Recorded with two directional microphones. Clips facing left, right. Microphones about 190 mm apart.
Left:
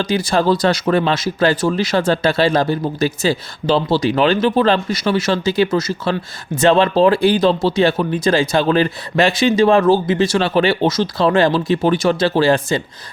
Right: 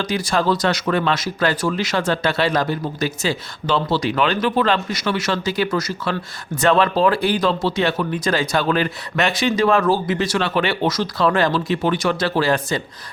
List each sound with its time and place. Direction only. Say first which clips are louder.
0.0 s speech: left 4 dB; 25° left (ahead or behind)